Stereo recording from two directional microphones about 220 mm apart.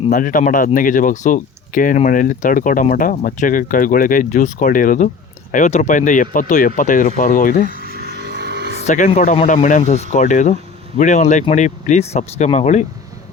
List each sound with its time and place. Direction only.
0.1 s speech: 40° left (ahead or behind)
7.7 s vehicle: 40° right (ahead or behind)
8.8 s speech: 35° left (ahead or behind)